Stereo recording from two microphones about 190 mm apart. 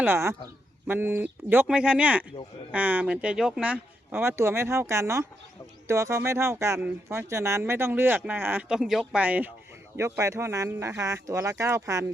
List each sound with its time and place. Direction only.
0.0 s speech: 15° right (ahead or behind)